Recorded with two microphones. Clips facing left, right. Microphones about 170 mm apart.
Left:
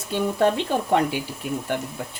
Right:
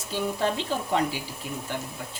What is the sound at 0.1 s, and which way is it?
Speech, 60° left (ahead or behind).